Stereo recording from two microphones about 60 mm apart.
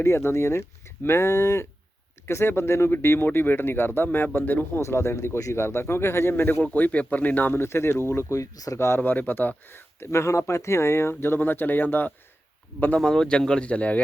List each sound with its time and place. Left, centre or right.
0.0 s speech: left
4.8 s speech: left
7.5 s speech: left
9.0 s speech: left
13.0 s speech: centre